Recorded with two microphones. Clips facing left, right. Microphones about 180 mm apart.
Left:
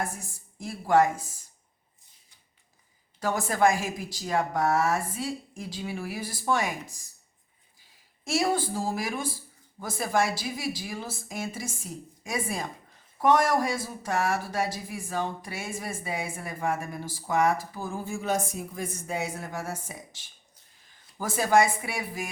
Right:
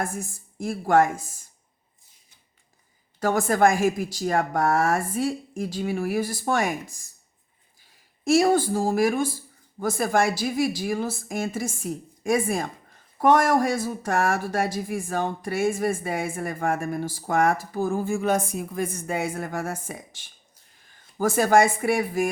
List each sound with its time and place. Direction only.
0.0 s a woman's voice: 50° right (ahead or behind)
3.2 s a woman's voice: 50° right (ahead or behind)
8.2 s a woman's voice: 50° right (ahead or behind)